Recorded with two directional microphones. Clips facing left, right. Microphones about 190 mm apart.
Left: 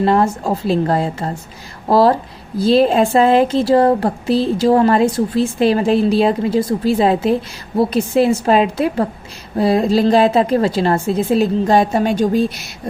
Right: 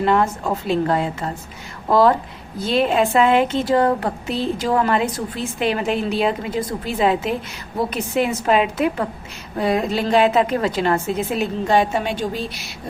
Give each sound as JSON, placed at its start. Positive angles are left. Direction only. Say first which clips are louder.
{"t": 0.0, "sound": "a woman's voice", "louder": "left 4 dB", "side_deg": 35}